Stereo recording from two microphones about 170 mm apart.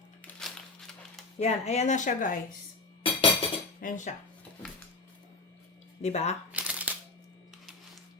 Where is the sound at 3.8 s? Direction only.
50° left (ahead or behind).